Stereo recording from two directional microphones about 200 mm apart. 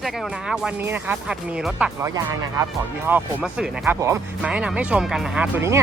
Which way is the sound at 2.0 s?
15° right (ahead or behind).